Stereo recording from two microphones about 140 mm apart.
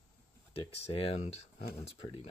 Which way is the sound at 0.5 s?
45° left (ahead or behind).